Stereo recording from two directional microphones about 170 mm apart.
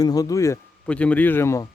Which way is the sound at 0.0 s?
20° left (ahead or behind).